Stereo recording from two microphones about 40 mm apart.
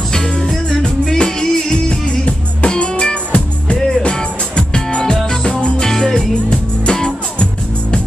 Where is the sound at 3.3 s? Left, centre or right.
Left.